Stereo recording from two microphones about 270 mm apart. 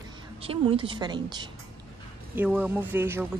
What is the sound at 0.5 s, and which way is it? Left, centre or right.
Speech, centre.